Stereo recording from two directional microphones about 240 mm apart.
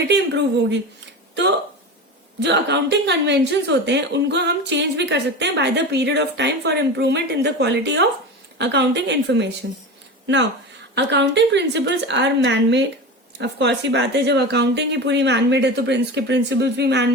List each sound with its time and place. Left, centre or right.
0.1 s a woman's voice: right
2.4 s a woman's voice: right